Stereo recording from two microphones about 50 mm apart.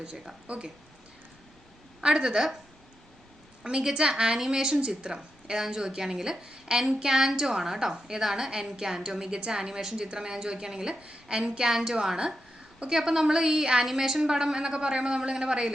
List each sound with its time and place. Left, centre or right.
0.4 s speech: right
2.0 s a woman's voice: centre
3.6 s a woman's voice: centre